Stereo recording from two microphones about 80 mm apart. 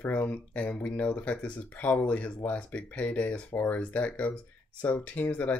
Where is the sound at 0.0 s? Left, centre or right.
Left.